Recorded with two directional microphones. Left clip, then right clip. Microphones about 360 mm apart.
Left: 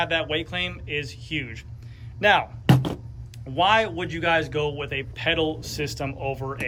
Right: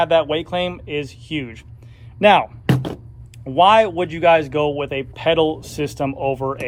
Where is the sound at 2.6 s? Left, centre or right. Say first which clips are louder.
Right 1 dB; centre.